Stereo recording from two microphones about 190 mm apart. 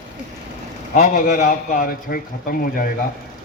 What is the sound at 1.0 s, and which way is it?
A man's voice, 45° left (ahead or behind).